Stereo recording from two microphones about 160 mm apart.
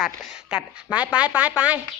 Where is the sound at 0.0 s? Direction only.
5° right (ahead or behind).